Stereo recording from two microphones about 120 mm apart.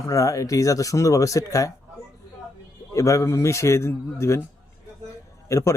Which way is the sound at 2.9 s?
25° left (ahead or behind).